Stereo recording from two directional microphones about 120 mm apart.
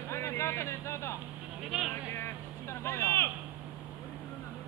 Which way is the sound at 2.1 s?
20° left (ahead or behind).